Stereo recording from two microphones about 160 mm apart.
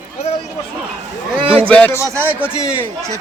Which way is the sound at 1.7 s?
10° left (ahead or behind).